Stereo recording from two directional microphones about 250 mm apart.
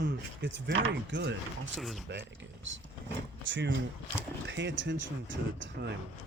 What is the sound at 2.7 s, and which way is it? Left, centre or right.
Speech, right.